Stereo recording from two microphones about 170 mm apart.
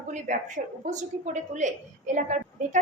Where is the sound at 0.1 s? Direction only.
45° right (ahead or behind).